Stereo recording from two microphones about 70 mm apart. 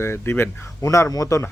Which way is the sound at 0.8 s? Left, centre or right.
Left.